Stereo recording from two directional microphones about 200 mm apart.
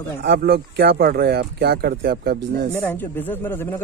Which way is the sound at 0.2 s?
50° right (ahead or behind).